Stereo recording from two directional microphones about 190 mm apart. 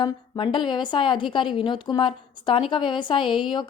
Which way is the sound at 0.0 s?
25° left (ahead or behind).